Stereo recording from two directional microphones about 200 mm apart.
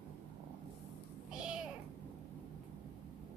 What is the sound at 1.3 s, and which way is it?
Cat, 5° right (ahead or behind).